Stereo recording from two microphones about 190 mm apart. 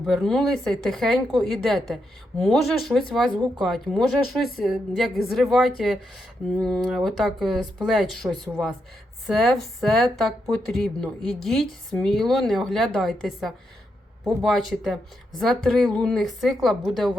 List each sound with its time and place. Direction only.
0.0 s speech: centre (ahead or behind)